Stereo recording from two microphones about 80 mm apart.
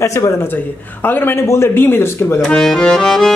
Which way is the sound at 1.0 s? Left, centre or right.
Left.